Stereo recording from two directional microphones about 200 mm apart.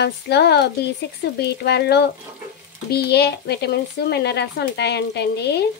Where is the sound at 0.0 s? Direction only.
55° left (ahead or behind).